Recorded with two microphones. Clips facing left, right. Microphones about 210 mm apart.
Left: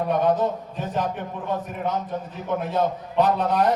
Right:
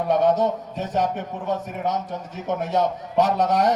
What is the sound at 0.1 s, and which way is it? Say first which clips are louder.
Speech: right 3 dB; 80° right.